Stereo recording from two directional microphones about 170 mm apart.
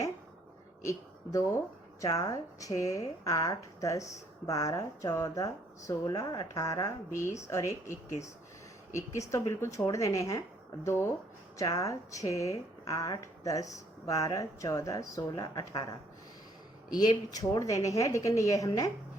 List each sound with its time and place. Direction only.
0.9 s speech: 20° left (ahead or behind)